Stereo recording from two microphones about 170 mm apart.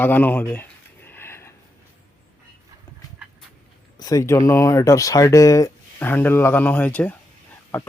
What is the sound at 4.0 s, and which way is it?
Speech, 20° left (ahead or behind).